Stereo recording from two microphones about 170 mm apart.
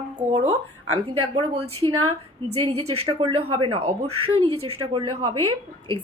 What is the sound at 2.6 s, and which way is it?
A woman's voice, 30° right (ahead or behind).